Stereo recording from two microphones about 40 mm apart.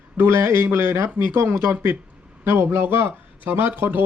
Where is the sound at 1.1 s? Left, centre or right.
Right.